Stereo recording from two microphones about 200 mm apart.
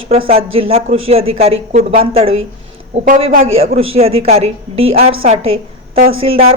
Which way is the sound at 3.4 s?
30° right (ahead or behind).